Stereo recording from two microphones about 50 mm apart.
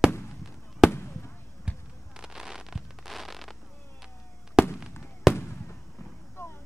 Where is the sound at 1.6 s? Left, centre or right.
Centre.